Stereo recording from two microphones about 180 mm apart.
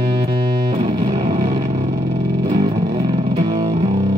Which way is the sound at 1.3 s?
25° right (ahead or behind).